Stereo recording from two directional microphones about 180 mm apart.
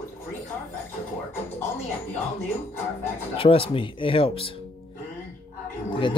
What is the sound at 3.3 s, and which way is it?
Speech, 30° left (ahead or behind).